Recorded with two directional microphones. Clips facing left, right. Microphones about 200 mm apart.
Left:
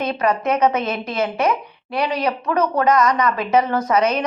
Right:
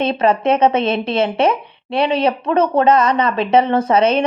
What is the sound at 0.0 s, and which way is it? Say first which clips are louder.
A woman's voice: right 4 dB; 30° right (ahead or behind).